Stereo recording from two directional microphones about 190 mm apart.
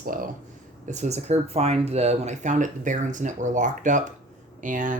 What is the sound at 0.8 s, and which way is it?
Speech, 35° right (ahead or behind).